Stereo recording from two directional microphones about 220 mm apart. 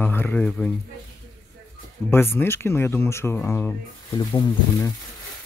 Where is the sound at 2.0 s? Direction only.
10° left (ahead or behind).